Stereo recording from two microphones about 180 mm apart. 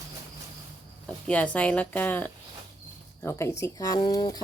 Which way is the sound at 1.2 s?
5° left (ahead or behind).